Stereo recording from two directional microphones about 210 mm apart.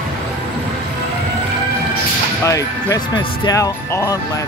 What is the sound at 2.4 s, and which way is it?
Speech, 15° left (ahead or behind).